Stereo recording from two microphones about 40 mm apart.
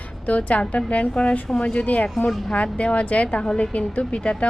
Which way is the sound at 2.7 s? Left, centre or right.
Left.